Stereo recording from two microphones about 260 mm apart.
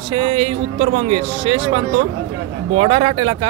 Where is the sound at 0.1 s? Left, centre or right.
Right.